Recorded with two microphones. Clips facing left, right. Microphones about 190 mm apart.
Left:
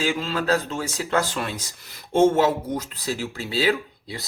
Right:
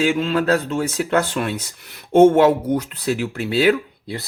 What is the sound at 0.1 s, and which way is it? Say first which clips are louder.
Speech: right 5 dB; 60° right (ahead or behind).